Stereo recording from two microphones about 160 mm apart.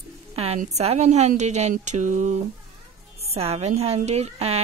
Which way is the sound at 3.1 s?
40° right (ahead or behind).